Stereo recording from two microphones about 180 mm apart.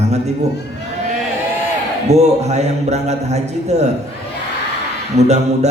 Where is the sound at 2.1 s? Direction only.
40° right (ahead or behind).